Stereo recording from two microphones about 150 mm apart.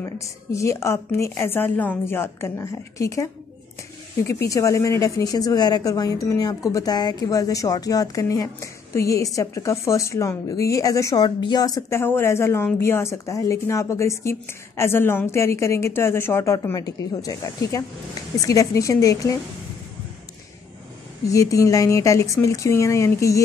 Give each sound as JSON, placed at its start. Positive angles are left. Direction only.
{"t": 0.0, "sound": "a woman's voice", "side_deg": 20}
{"t": 4.5, "sound": "a woman's voice", "side_deg": 20}
{"t": 21.3, "sound": "a woman's voice", "side_deg": 20}